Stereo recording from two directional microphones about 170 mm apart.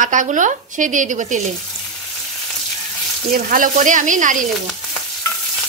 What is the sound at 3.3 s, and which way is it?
Speech, 55° right (ahead or behind).